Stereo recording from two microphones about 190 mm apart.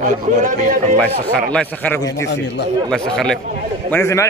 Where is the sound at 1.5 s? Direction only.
5° left (ahead or behind).